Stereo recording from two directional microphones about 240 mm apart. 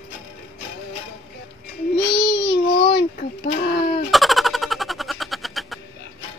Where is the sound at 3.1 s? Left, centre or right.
Left.